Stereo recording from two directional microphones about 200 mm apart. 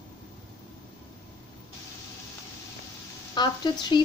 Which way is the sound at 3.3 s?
20° left (ahead or behind).